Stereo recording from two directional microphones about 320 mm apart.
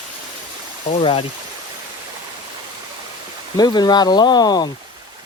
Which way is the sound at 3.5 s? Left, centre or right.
Centre.